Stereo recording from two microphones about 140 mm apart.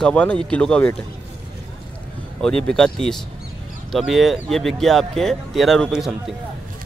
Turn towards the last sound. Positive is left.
turn(degrees=-5)  # may be behind; listen again after turning